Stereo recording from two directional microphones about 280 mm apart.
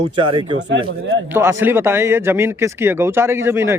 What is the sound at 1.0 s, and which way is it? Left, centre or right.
Speech, right.